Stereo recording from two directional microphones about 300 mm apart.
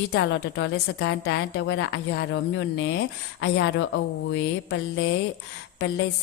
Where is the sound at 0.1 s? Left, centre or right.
Left.